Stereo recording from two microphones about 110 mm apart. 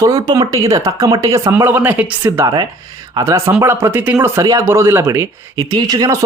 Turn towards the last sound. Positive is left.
turn(degrees=-35)  # may be behind; listen again after turning